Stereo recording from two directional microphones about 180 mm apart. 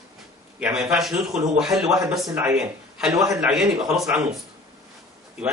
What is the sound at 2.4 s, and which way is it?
A man's voice, 5° right (ahead or behind).